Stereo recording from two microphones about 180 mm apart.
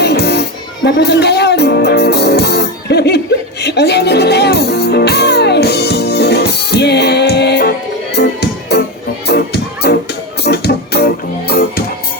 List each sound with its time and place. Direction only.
0.0 s music: 65° left (ahead or behind)
0.9 s speech: 70° left (ahead or behind)
3.6 s music: 70° left (ahead or behind)